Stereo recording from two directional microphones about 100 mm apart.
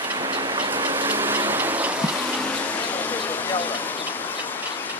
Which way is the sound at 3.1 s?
15° left (ahead or behind).